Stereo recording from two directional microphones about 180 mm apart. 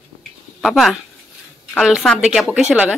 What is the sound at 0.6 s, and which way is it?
A woman's voice, centre (ahead or behind).